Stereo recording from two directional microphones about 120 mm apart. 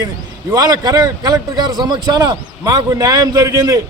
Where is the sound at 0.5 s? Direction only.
35° right (ahead or behind).